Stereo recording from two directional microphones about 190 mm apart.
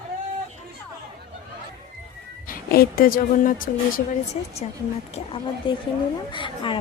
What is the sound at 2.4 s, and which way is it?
Speech, 50° left (ahead or behind).